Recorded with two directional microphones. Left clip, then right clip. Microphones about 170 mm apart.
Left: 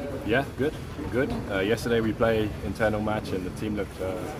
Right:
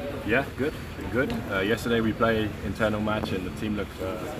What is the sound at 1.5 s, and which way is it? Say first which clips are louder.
Speech: left 1 dB; 25° left (ahead or behind).